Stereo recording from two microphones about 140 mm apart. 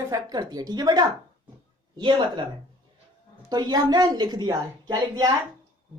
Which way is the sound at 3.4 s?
30° right (ahead or behind).